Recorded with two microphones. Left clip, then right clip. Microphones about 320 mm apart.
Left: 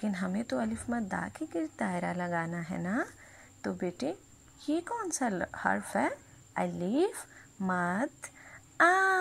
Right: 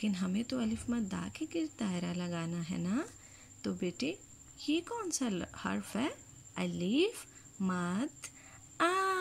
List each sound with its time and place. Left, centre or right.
0.0 s speech: centre